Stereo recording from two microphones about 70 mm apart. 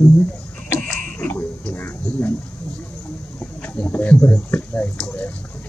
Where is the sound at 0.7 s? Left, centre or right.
Left.